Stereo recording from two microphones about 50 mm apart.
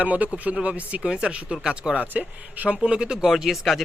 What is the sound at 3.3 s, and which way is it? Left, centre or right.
Speech, centre.